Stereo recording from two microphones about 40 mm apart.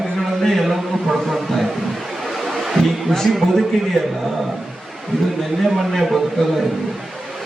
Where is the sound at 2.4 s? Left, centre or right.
Centre.